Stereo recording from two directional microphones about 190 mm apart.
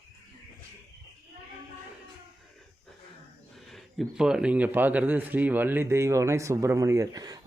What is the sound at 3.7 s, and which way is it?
A man's voice, centre (ahead or behind).